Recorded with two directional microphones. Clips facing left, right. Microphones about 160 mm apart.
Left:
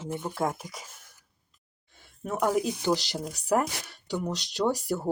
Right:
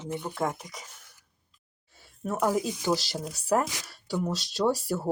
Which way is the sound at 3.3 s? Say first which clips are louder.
Even; 15° left (ahead or behind).